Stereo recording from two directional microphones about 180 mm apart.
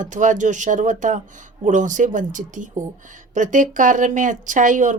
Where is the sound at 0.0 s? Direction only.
45° right (ahead or behind).